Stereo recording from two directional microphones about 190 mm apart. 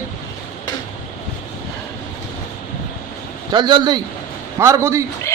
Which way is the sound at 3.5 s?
20° right (ahead or behind).